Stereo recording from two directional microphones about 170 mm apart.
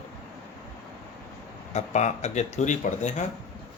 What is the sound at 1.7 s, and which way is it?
Speech, 40° left (ahead or behind).